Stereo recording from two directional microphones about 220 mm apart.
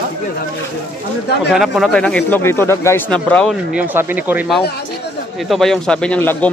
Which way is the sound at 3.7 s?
10° right (ahead or behind).